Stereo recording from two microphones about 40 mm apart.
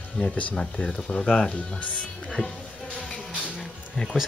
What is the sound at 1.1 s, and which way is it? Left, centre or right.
Speech, left.